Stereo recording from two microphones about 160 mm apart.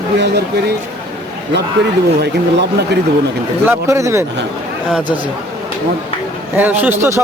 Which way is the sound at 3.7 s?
20° right (ahead or behind).